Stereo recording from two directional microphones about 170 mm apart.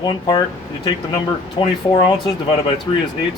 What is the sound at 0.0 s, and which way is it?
Speech, 25° left (ahead or behind).